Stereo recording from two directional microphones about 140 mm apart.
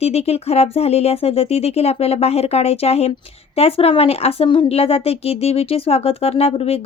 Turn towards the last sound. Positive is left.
turn(degrees=45)  # may be behind; listen again after turning